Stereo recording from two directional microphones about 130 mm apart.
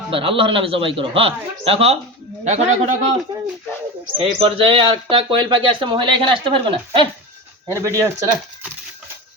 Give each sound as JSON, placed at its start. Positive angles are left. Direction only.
{"t": 0.1, "sound": "a man's voice", "side_deg": -45}
{"t": 2.4, "sound": "a man's voice", "side_deg": -65}
{"t": 4.2, "sound": "speech", "side_deg": -45}
{"t": 7.7, "sound": "speech", "side_deg": -20}